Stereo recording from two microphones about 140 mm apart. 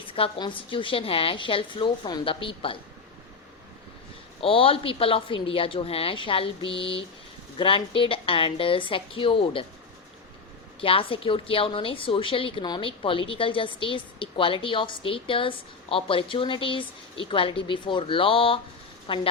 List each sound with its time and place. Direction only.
0.1 s a woman's voice: 35° left (ahead or behind)
4.4 s a woman's voice: 40° left (ahead or behind)
10.8 s a woman's voice: 40° left (ahead or behind)